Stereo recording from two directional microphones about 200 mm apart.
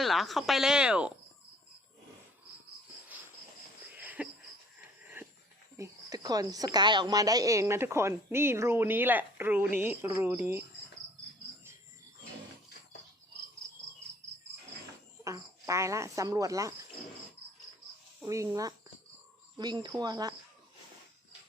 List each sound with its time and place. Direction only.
0.0 s speech: centre (ahead or behind)
3.9 s a sound: 10° right (ahead or behind)
5.2 s wheeze: 10° right (ahead or behind)
5.7 s a woman's voice: 15° right (ahead or behind)
15.2 s speech: 15° right (ahead or behind)
19.5 s speech: 20° right (ahead or behind)